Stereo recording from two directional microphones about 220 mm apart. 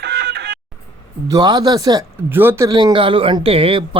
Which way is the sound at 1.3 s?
15° right (ahead or behind).